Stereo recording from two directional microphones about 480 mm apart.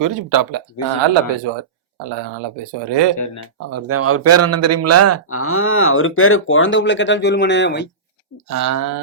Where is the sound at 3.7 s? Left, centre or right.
Right.